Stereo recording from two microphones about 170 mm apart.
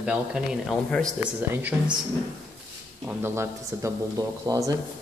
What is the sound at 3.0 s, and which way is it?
A man's voice, 10° right (ahead or behind).